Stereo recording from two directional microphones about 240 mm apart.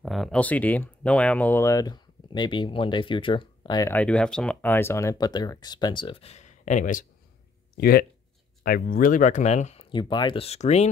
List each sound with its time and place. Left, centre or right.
0.0 s speech: centre; by 10.9 s left